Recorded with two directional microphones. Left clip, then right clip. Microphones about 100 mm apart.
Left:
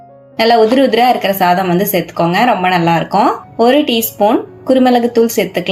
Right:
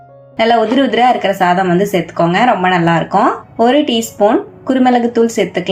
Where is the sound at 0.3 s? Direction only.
20° left (ahead or behind).